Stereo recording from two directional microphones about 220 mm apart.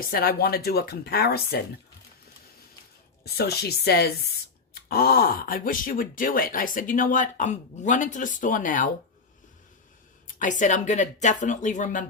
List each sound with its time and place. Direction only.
0.0 s speech: 45° left (ahead or behind)
3.3 s speech: 45° left (ahead or behind)
10.3 s speech: 35° left (ahead or behind)